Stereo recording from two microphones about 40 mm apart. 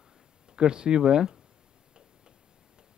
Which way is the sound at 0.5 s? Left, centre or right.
Right.